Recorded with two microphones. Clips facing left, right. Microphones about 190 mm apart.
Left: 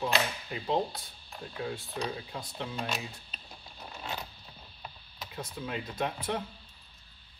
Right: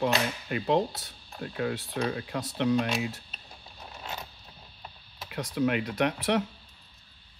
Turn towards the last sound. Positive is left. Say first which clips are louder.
# right 7 dB
turn(degrees=-85)